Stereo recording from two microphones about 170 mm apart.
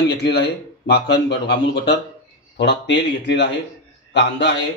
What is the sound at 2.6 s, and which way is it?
A man's voice, 90° left.